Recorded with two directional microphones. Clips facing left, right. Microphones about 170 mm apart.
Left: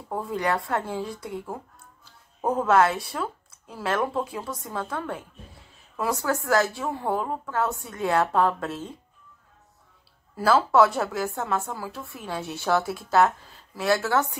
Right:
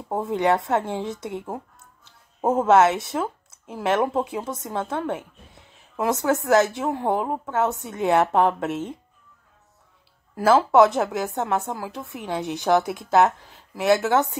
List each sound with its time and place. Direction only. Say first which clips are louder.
0.1 s speech: right 5 dB; 25° right (ahead or behind)
10.3 s speech: right 3 dB; 20° right (ahead or behind)